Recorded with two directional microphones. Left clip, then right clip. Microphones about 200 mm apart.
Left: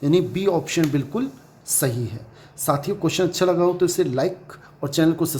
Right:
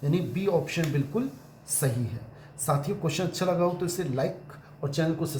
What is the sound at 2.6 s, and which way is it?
Speech, 45° left (ahead or behind).